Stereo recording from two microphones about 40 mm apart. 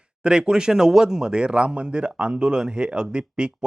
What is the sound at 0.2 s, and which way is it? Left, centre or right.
Speech, right.